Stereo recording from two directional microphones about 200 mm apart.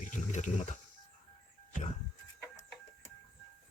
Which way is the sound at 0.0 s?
40° left (ahead or behind).